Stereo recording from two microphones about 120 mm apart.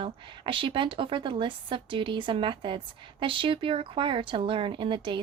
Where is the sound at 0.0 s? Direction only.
45° right (ahead or behind).